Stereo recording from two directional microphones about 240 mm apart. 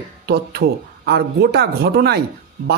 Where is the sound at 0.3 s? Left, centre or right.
Right.